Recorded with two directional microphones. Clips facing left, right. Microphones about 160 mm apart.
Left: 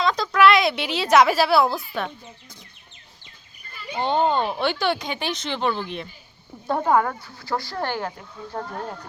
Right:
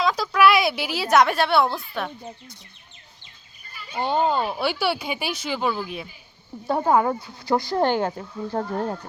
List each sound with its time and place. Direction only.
0.0 s a woman's voice: 5° right (ahead or behind)
3.9 s speech: 5° right (ahead or behind); by 8.1 s 25° right (ahead or behind)
8.5 s speech: 35° right (ahead or behind)